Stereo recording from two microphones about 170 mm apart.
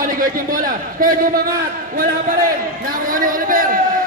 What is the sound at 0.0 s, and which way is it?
A man's voice, 55° right (ahead or behind).